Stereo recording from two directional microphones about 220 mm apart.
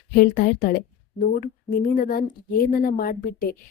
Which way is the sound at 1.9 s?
40° left (ahead or behind).